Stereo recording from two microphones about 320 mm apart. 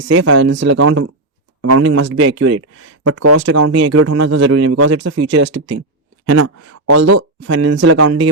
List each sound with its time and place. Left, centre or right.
0.1 s a man's voice: right